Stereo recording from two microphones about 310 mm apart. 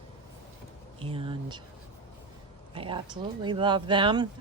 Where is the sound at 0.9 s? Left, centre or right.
Centre.